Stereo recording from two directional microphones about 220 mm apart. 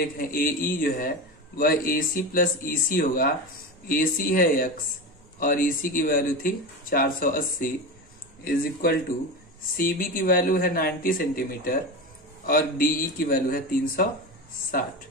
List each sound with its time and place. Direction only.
0.0 s speech: 40° left (ahead or behind)
9.8 s speech: 40° left (ahead or behind)